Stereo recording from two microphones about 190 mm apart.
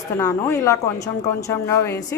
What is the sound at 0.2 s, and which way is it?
A woman's voice, 15° left (ahead or behind).